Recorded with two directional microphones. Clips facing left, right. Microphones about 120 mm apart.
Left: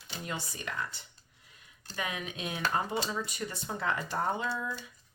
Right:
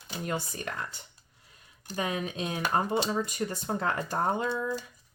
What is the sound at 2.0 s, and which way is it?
Speech, 35° right (ahead or behind).